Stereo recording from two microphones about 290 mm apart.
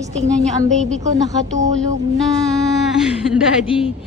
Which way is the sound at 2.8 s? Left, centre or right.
Centre.